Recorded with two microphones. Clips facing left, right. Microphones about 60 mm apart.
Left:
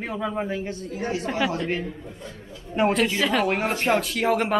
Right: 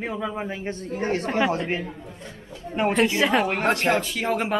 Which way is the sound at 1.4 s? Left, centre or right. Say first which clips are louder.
Even; right.